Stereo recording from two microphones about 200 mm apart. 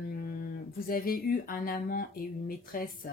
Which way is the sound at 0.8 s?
45° left (ahead or behind).